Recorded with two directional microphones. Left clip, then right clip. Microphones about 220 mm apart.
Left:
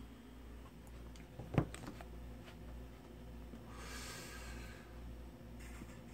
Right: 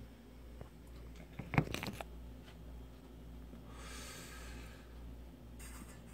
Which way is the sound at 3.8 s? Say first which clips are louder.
Left 1 dB; 5° right (ahead or behind).